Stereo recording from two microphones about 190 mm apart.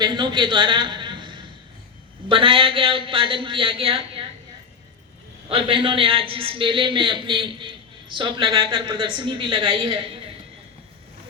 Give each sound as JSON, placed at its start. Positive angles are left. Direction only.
{"t": 0.0, "sound": "a man's voice", "side_deg": -25}
{"t": 5.5, "sound": "a man's voice", "side_deg": -30}